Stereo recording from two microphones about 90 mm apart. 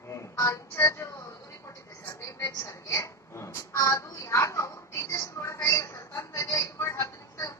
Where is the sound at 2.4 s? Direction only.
35° left (ahead or behind).